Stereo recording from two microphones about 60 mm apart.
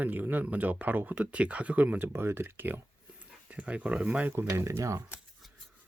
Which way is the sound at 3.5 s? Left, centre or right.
Right.